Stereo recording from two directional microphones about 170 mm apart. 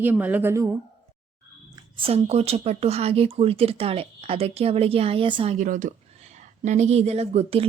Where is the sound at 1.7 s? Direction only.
30° right (ahead or behind).